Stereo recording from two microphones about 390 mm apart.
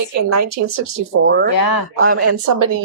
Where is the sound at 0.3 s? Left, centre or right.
Right.